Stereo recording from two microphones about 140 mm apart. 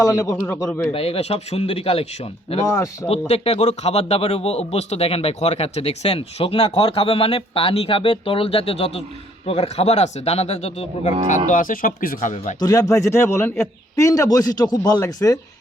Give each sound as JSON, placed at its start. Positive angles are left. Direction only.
{"t": 0.0, "sound": "a man's voice", "side_deg": 20}
{"t": 0.5, "sound": "speech", "side_deg": 10}
{"t": 0.9, "sound": "speech", "side_deg": 45}
{"t": 2.6, "sound": "a man's voice", "side_deg": 20}
{"t": 3.1, "sound": "speech", "side_deg": 45}
{"t": 11.3, "sound": "speech", "side_deg": 65}
{"t": 12.5, "sound": "a man's voice", "side_deg": 25}